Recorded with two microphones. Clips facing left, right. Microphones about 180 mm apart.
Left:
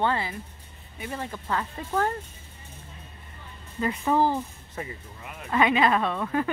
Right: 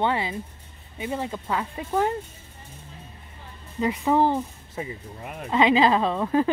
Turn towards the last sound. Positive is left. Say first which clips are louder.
# right 4 dB
turn(degrees=-25)  # may be behind; listen again after turning